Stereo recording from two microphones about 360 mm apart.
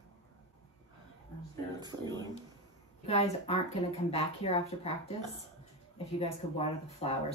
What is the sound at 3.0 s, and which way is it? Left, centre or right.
Speech, centre.